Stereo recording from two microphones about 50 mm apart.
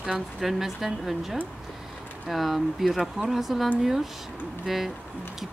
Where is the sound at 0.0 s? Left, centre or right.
Centre.